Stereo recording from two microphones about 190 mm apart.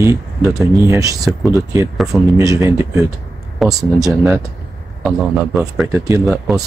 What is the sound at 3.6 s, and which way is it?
Speech, centre (ahead or behind).